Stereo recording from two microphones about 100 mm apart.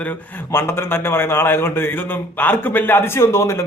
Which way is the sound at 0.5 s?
25° left (ahead or behind).